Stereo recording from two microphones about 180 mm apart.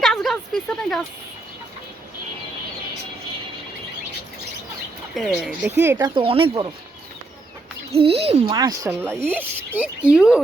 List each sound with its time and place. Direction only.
0.0 s a sound: centre (ahead or behind)
5.1 s speech: 5° right (ahead or behind)
6.0 s speech: 30° right (ahead or behind)
7.9 s speech: 35° right (ahead or behind)
8.5 s speech: 20° right (ahead or behind)